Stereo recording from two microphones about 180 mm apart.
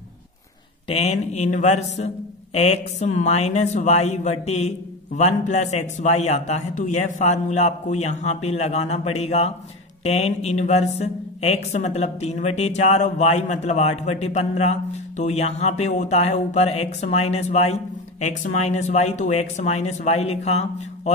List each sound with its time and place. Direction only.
0.8 s a man's voice: 35° left (ahead or behind)